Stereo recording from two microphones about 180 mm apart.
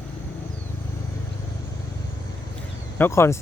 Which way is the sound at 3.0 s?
15° left (ahead or behind).